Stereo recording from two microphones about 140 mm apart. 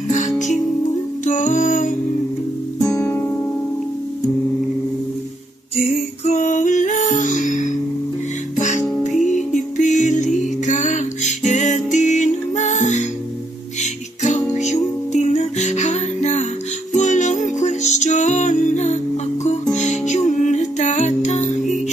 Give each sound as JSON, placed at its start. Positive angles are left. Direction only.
{"t": 0.1, "sound": "music", "side_deg": 60}
{"t": 6.2, "sound": "music", "side_deg": 60}
{"t": 14.2, "sound": "music", "side_deg": 55}